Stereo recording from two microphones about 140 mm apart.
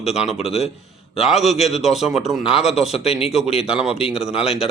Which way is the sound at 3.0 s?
45° left (ahead or behind).